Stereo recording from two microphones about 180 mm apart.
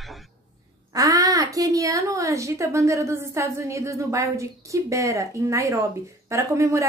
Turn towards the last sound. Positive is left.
turn(degrees=-15)  # may be behind; listen again after turning